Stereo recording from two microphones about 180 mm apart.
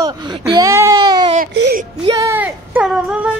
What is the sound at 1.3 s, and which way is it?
Speech, 60° right (ahead or behind).